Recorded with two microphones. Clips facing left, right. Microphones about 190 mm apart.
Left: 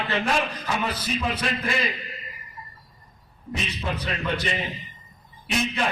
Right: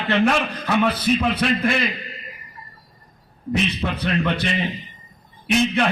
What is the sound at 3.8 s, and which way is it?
Speech, 65° right (ahead or behind).